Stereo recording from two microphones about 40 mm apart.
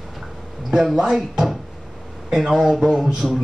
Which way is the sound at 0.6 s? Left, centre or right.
Centre.